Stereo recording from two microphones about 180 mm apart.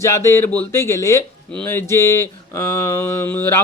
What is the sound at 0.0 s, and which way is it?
Mantra, 15° left (ahead or behind).